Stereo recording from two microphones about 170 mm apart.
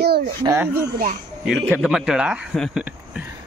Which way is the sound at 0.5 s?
15° right (ahead or behind).